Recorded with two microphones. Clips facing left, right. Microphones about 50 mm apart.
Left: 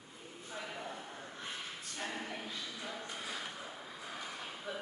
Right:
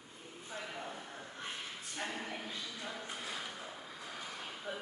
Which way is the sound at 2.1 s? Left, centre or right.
Centre.